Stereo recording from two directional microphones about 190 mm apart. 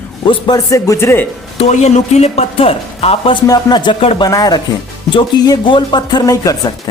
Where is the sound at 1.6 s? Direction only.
35° left (ahead or behind).